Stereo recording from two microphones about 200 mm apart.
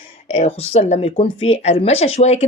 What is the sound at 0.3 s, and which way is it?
A woman's voice, 30° left (ahead or behind).